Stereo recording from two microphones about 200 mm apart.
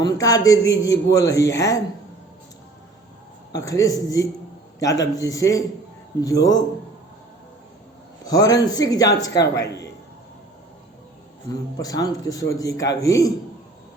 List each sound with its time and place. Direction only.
0.0 s speech: 20° left (ahead or behind)
3.5 s speech: 15° left (ahead or behind)
8.2 s speech: 20° left (ahead or behind)
11.5 s speech: 20° left (ahead or behind)